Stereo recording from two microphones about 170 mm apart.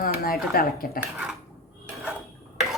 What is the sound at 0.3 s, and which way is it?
Speech, 60° left (ahead or behind).